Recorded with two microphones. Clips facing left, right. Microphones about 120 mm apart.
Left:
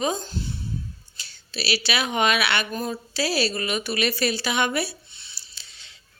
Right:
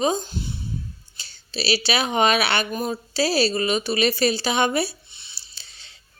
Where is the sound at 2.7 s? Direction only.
20° right (ahead or behind).